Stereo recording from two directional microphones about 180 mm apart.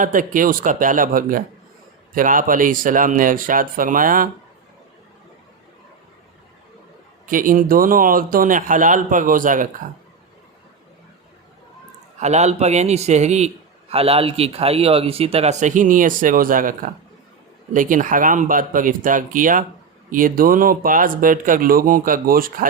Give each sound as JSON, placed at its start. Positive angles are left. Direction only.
{"t": 0.0, "sound": "speech", "side_deg": -50}
{"t": 7.3, "sound": "speech", "side_deg": -50}
{"t": 12.2, "sound": "speech", "side_deg": -40}